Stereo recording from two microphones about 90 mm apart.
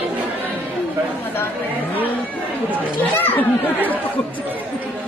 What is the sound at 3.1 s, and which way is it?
Chatter, 20° left (ahead or behind).